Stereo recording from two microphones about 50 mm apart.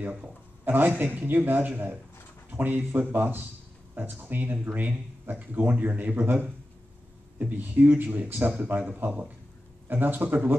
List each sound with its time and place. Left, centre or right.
0.0 s speech: right
7.3 s speech: right